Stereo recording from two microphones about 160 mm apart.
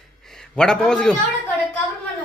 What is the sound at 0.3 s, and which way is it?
Speech, 5° left (ahead or behind).